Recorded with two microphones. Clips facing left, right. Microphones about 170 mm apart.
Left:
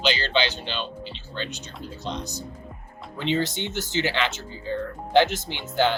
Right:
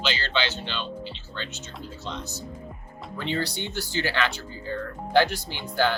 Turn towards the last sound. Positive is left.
turn(degrees=20)  # may be behind; listen again after turning